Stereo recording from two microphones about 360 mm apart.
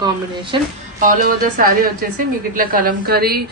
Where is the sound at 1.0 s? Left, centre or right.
Right.